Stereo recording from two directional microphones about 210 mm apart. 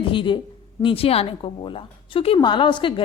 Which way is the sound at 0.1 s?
25° left (ahead or behind).